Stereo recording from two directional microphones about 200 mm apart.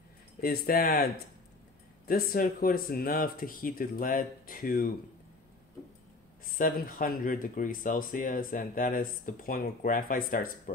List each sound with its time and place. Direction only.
0.4 s speech: 50° left (ahead or behind)
2.0 s speech: 45° left (ahead or behind)
6.4 s speech: 45° left (ahead or behind)